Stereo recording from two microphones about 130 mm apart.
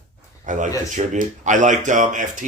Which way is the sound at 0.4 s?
75° right (ahead or behind).